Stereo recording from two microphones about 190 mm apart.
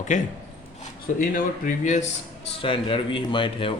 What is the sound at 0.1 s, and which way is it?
Speech, 40° left (ahead or behind).